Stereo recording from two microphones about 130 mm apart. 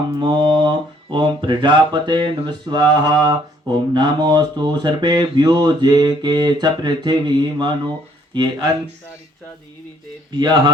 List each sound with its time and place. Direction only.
0.2 s speech: 35° right (ahead or behind)
10.3 s speech: 35° right (ahead or behind)